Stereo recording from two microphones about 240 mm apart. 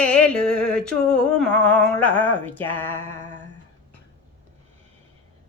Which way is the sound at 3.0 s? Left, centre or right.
Right.